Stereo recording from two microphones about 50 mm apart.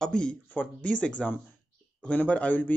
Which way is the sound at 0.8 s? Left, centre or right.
Left.